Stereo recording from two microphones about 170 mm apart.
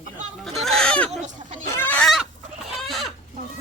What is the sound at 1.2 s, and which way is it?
Goat, 45° right (ahead or behind).